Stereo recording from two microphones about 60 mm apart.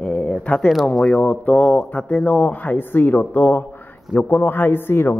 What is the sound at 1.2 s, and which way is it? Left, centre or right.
Speech, left.